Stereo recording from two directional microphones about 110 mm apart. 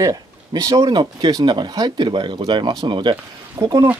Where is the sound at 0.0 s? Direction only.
35° right (ahead or behind).